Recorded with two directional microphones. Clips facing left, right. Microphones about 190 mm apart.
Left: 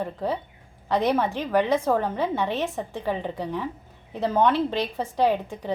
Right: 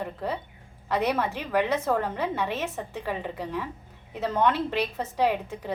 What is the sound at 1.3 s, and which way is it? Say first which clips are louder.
Speech: left 3 dB; 10° right (ahead or behind).